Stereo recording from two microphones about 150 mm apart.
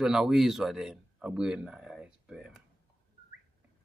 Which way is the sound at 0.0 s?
5° right (ahead or behind).